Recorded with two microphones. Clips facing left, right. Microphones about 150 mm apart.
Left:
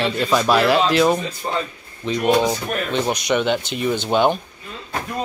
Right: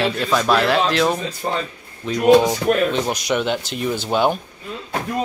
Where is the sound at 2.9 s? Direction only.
Centre (ahead or behind).